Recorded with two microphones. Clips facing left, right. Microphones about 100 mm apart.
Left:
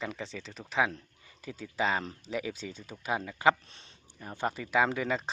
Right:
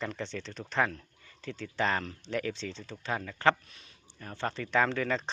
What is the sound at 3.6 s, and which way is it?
Speech, 30° left (ahead or behind).